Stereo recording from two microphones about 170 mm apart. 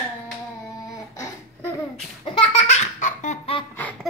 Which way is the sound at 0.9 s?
20° left (ahead or behind).